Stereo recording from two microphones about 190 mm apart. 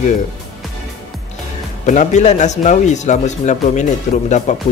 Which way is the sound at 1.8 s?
40° left (ahead or behind).